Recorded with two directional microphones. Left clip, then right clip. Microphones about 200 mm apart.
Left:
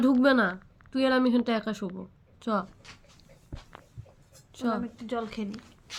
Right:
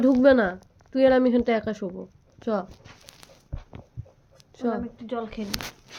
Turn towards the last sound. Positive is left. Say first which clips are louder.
# right 1 dB
turn(degrees=45)  # may be behind; listen again after turning